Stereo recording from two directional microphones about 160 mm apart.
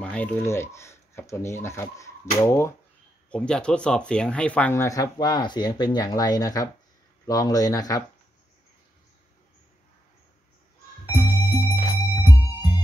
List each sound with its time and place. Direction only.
0.0 s speech: 10° left (ahead or behind)
3.3 s speech: 5° left (ahead or behind); by 8.0 s 25° left (ahead or behind)
11.1 s music: 25° left (ahead or behind)